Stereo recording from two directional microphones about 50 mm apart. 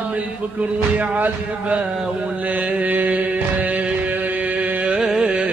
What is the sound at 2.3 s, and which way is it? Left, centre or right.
Mantra, right.